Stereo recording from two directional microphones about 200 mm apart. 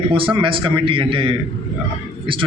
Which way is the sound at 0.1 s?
25° right (ahead or behind).